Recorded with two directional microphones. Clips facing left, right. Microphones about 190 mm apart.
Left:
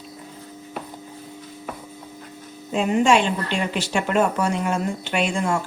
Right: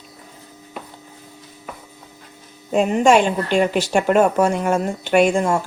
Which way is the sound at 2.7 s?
45° right (ahead or behind).